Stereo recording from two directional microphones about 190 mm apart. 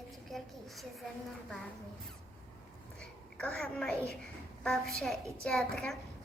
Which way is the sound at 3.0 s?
5° left (ahead or behind).